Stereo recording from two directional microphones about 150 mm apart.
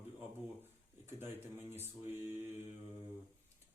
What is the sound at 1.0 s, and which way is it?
Speech, 15° right (ahead or behind).